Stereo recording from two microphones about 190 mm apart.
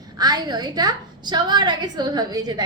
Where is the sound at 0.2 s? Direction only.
20° right (ahead or behind).